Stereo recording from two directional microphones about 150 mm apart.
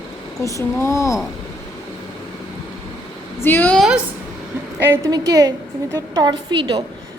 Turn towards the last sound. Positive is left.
turn(degrees=-30)  # may be behind; listen again after turning